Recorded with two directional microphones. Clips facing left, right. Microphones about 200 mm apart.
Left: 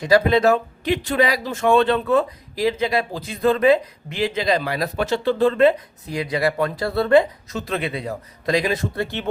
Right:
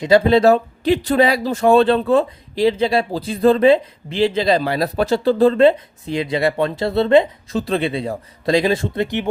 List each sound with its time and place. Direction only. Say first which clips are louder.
0.0 s speech: right 4 dB; 25° right (ahead or behind)